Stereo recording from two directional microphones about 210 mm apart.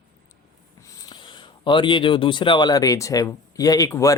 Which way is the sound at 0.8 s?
15° left (ahead or behind).